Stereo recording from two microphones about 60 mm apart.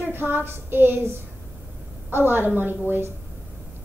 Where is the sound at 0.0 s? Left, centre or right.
Right.